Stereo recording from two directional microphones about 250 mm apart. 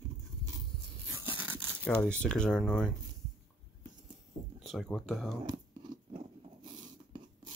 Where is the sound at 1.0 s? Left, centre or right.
Centre.